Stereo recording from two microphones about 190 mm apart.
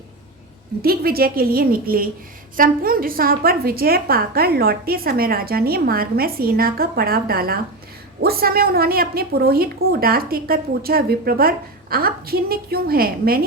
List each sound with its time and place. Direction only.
0.8 s a woman's voice: 55° right (ahead or behind)